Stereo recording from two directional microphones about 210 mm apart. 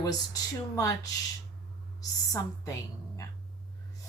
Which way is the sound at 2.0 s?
15° left (ahead or behind).